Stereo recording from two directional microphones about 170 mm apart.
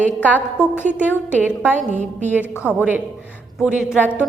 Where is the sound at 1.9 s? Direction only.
45° right (ahead or behind).